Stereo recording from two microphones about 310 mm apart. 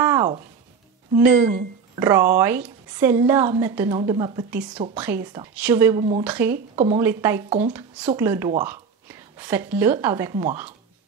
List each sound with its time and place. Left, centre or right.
0.0 s a sound: centre
1.1 s a woman's voice: centre
6.5 s speech: right
7.0 s a woman's voice: centre